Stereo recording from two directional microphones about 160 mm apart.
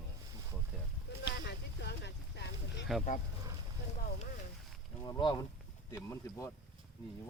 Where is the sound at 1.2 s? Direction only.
90° left.